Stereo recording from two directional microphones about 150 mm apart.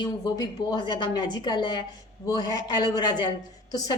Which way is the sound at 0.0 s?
30° left (ahead or behind).